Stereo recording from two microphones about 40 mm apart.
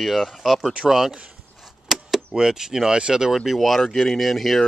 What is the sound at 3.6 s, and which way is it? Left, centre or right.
Speech, centre.